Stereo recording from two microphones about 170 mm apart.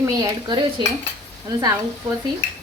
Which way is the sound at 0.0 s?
25° right (ahead or behind).